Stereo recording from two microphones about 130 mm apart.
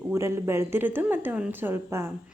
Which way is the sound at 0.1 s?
20° right (ahead or behind).